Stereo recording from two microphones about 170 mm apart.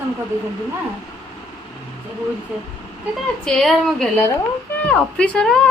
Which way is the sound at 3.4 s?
Centre (ahead or behind).